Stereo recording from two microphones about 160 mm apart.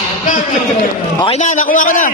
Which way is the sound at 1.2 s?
45° left (ahead or behind).